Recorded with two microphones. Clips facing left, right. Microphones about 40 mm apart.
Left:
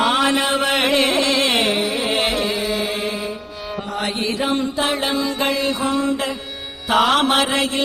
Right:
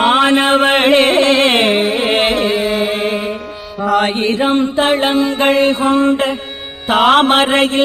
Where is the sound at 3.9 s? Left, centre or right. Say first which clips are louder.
Right 8 dB; right.